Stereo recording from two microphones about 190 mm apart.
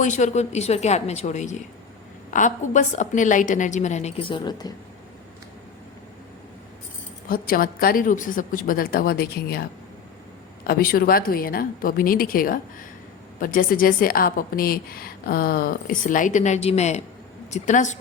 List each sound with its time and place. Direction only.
0.0 s a woman's voice: 40° left (ahead or behind); by 4.7 s 20° left (ahead or behind)
7.3 s a woman's voice: 50° left (ahead or behind)